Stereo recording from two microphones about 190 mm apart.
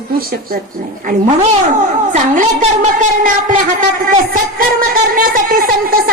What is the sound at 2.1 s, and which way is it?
Speech, 40° right (ahead or behind).